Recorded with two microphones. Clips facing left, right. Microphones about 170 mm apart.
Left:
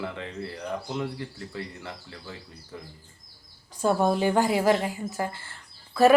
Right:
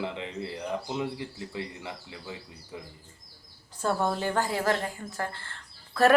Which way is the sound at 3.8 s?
15° left (ahead or behind).